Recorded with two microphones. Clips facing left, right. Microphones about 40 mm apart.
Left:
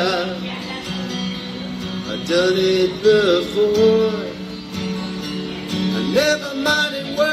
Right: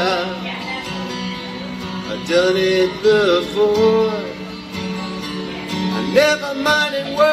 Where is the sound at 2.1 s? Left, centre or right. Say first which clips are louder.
Right 2 dB; right.